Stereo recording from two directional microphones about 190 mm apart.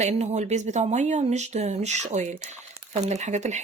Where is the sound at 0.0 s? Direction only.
35° right (ahead or behind).